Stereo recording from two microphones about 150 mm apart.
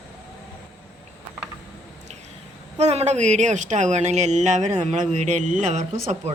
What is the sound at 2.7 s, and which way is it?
Speech, 45° right (ahead or behind).